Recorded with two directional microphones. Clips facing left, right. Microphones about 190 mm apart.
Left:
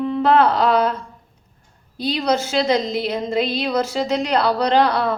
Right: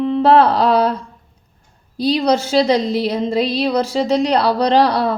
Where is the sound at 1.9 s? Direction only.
35° right (ahead or behind).